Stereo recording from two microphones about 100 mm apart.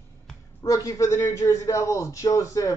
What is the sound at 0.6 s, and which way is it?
Speech, 35° left (ahead or behind).